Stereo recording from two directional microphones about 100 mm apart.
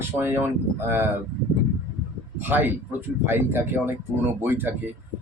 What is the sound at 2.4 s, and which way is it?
Speech, 20° right (ahead or behind).